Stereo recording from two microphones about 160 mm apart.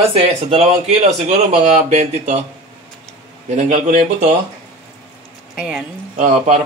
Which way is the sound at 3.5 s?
50° right (ahead or behind).